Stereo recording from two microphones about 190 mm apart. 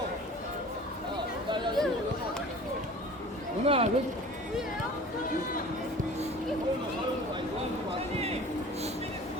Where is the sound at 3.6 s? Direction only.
30° right (ahead or behind).